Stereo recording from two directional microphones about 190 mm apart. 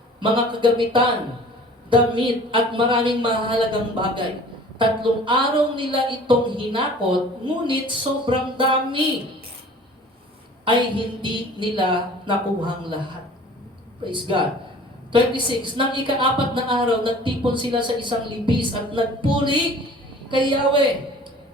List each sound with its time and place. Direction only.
0.2 s a woman's voice: 25° right (ahead or behind)
10.7 s a woman's voice: 25° right (ahead or behind)
14.0 s a woman's voice: 25° right (ahead or behind)